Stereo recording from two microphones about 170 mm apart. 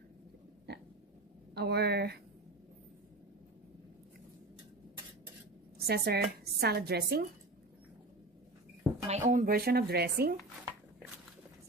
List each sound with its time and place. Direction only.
1.5 s speech: 70° right (ahead or behind)
5.9 s speech: 70° right (ahead or behind)
9.0 s speech: 45° right (ahead or behind); by 10.3 s 65° right (ahead or behind)